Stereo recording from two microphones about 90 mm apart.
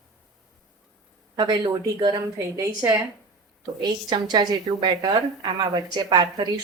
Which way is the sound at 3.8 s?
50° right (ahead or behind).